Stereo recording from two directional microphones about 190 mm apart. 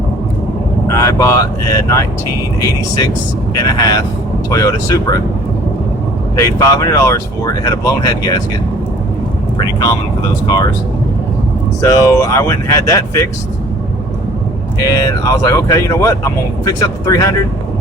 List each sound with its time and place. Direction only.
0.9 s speech: 15° left (ahead or behind)
6.4 s speech: 15° left (ahead or behind)
11.8 s speech: 15° left (ahead or behind)
14.8 s speech: 20° left (ahead or behind)